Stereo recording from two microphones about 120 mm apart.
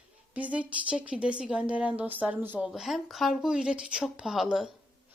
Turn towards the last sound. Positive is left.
turn(degrees=0)  # may be behind; listen again after turning